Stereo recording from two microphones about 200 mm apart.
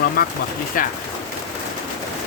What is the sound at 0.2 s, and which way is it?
Speech, 50° left (ahead or behind).